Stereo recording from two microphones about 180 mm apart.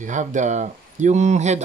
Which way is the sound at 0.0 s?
45° right (ahead or behind).